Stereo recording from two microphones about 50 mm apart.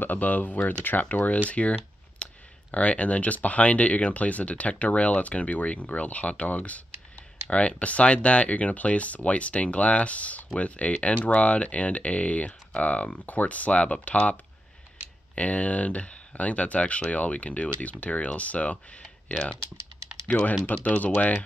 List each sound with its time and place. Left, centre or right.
0.0 s speech: left
20.7 s speech: left